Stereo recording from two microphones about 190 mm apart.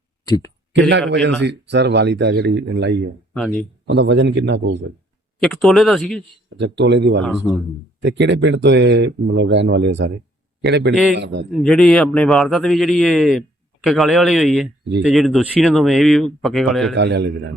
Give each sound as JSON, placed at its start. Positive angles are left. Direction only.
{"t": 0.7, "sound": "speech", "side_deg": -70}
{"t": 3.3, "sound": "speech", "side_deg": 5}
{"t": 3.8, "sound": "speech", "side_deg": -70}
{"t": 5.4, "sound": "speech", "side_deg": 0}
{"t": 6.6, "sound": "speech", "side_deg": -65}
{"t": 11.6, "sound": "speech", "side_deg": 5}
{"t": 16.9, "sound": "speech", "side_deg": -65}